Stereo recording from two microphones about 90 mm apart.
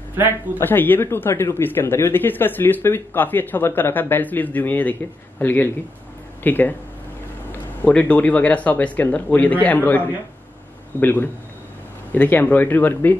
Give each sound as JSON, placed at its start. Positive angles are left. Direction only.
{"t": 0.6, "sound": "speech", "side_deg": 20}
{"t": 7.8, "sound": "a man's voice", "side_deg": 15}